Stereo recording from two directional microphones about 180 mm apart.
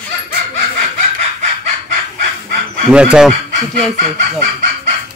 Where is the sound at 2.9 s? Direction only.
5° right (ahead or behind).